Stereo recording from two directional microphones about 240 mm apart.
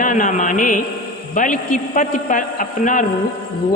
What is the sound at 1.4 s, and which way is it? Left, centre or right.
A man's voice, left.